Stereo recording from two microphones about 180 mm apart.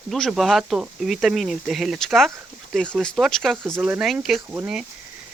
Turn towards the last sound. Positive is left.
turn(degrees=-10)  # may be behind; listen again after turning